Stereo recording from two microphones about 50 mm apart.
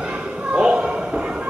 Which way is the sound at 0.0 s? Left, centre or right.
Right.